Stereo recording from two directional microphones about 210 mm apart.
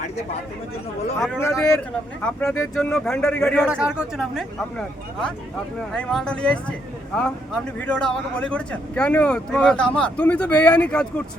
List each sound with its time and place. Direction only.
1.4 s speech: 10° left (ahead or behind)
3.7 s speech: 5° right (ahead or behind)